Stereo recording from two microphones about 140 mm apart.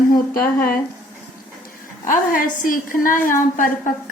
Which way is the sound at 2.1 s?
75° left (ahead or behind).